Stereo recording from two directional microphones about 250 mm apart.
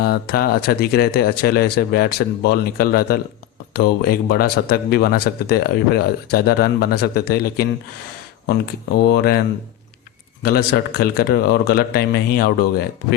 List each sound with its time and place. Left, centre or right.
0.0 s speech: left
9.0 s speech: left
10.4 s speech: left